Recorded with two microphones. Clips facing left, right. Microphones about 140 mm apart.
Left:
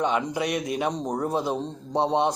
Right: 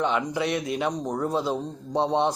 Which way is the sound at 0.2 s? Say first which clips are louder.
Even; 20° left (ahead or behind).